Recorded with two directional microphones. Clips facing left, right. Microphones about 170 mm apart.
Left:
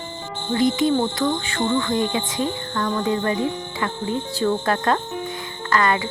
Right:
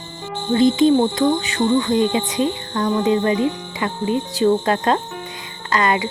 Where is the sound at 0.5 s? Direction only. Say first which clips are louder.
Right 5 dB; 25° right (ahead or behind).